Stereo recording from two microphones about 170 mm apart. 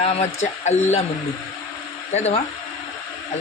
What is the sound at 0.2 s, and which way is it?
Speech, 40° left (ahead or behind).